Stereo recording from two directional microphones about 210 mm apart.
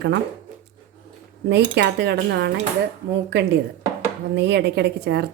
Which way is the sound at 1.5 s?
55° right (ahead or behind).